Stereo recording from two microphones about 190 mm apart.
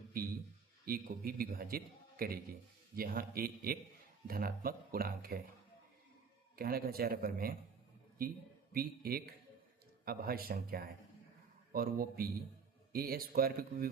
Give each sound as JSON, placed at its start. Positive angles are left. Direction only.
{"t": 0.9, "sound": "a man's voice", "side_deg": -50}
{"t": 6.6, "sound": "a man's voice", "side_deg": -50}